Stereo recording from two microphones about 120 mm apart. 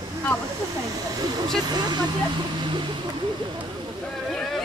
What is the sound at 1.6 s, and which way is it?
Speech, 35° right (ahead or behind).